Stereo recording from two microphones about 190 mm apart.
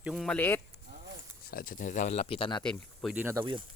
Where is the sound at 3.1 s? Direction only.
10° right (ahead or behind).